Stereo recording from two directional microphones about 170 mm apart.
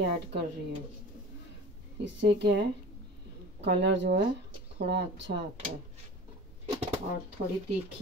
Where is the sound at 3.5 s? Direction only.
90° right.